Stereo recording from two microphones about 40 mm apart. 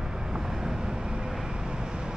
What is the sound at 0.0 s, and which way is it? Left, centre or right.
Vehicle, centre.